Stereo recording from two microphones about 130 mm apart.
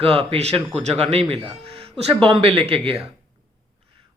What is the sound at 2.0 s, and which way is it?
Speech, 45° right (ahead or behind).